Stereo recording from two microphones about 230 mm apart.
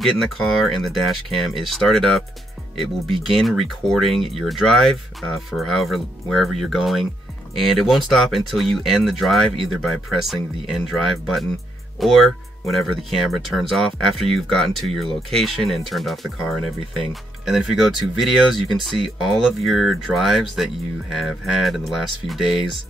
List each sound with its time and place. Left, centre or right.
0.0 s speech: centre
12.0 s speech: centre